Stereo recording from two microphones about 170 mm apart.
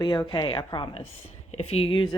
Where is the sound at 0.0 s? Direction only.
25° left (ahead or behind).